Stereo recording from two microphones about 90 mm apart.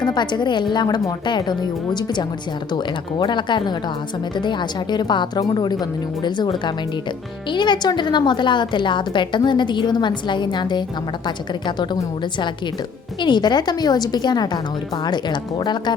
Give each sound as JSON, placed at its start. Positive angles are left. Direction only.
{"t": 0.0, "sound": "a woman's voice", "side_deg": 55}
{"t": 13.2, "sound": "a woman's voice", "side_deg": 55}